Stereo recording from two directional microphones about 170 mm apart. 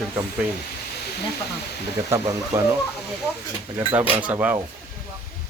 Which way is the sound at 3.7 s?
10° right (ahead or behind).